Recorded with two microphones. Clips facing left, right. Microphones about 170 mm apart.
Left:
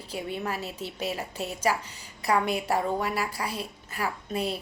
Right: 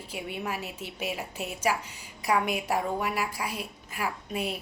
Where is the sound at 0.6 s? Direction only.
35° left (ahead or behind).